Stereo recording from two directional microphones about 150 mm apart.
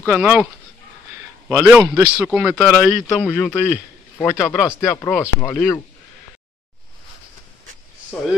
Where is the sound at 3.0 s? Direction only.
5° left (ahead or behind).